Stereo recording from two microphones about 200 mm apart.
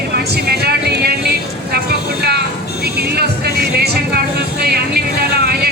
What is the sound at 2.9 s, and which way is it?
Music, 55° right (ahead or behind).